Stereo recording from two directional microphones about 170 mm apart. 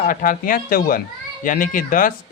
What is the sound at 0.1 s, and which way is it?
A man's voice, 50° left (ahead or behind).